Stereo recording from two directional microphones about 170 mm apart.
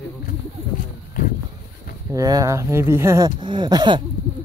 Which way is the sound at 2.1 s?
20° right (ahead or behind).